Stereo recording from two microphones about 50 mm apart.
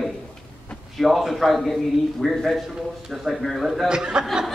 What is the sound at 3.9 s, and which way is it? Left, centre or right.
Speech, centre.